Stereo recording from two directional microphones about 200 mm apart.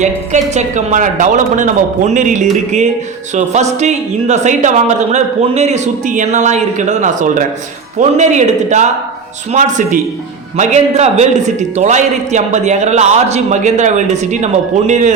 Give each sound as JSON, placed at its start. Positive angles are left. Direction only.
{"t": 0.0, "sound": "a man's voice", "side_deg": -35}